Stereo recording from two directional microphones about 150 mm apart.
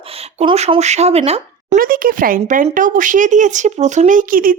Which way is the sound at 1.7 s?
70° right (ahead or behind).